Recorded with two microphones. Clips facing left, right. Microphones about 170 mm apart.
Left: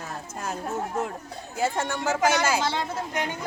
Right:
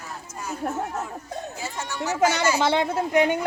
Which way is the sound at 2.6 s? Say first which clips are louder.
Right 6 dB; 60° right (ahead or behind).